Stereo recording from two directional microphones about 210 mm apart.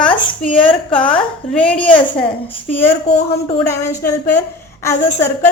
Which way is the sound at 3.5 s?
10° left (ahead or behind).